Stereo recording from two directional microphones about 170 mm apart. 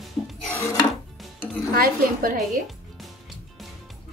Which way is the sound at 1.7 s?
60° right (ahead or behind).